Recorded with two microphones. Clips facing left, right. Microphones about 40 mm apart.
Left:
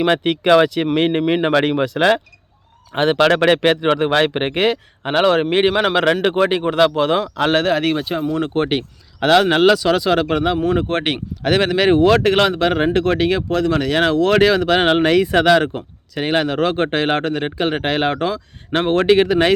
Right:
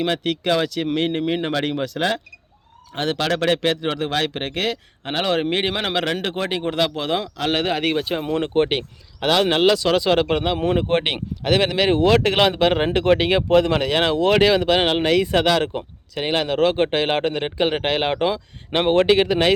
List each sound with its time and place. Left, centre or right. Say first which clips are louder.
0.1 s speech: left 6 dB; left
0.4 s speech: left 9 dB; left
3.2 s speech: left 6 dB; left
5.1 s a man's voice: left 6 dB; centre
7.5 s speech: left 3 dB; centre; by 13.9 s right
13.9 s speech: left 3 dB; centre